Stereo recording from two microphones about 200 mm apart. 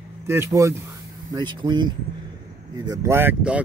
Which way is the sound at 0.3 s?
15° right (ahead or behind).